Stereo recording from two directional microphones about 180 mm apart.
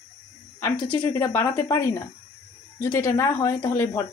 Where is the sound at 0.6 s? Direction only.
15° left (ahead or behind).